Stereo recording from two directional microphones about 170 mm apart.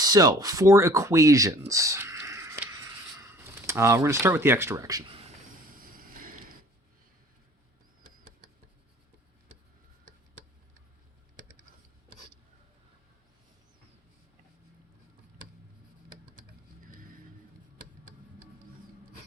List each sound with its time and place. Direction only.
0.0 s speech: 20° right (ahead or behind)
5.7 s vehicle: 60° right (ahead or behind)